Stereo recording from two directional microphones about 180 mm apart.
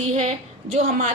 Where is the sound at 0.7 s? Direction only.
40° right (ahead or behind).